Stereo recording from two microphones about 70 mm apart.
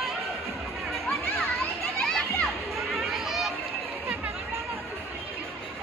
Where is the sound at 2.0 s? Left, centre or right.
Centre.